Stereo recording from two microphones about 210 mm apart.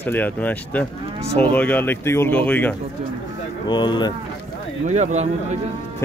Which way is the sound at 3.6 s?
20° left (ahead or behind).